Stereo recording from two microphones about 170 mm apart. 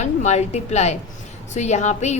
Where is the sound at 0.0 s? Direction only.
40° left (ahead or behind).